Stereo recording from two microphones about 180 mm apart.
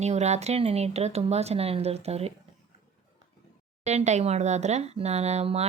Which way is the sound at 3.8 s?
40° right (ahead or behind).